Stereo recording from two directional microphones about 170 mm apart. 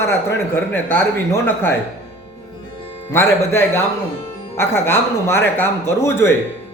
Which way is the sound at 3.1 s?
15° left (ahead or behind).